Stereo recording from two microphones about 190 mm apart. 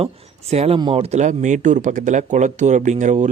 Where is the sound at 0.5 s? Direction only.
30° right (ahead or behind).